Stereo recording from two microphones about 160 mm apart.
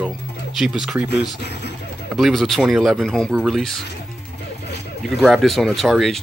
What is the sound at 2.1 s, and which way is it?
Speech, centre (ahead or behind).